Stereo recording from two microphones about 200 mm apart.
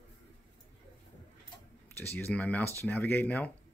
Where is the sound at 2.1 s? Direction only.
10° left (ahead or behind).